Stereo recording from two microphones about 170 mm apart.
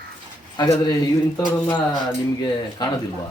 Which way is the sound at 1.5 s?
10° left (ahead or behind).